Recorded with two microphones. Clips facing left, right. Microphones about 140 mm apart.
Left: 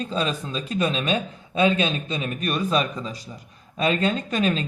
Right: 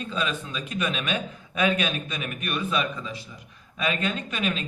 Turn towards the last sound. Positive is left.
turn(degrees=35)  # may be behind; listen again after turning